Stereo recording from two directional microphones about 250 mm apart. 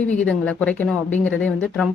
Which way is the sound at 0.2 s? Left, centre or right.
Centre.